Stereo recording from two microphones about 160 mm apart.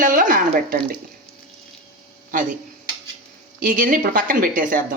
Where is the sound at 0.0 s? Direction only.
60° right (ahead or behind).